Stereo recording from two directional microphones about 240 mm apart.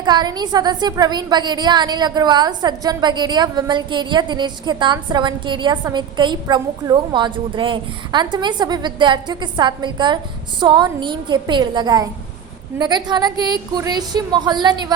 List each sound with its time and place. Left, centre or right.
0.0 s a woman's voice: centre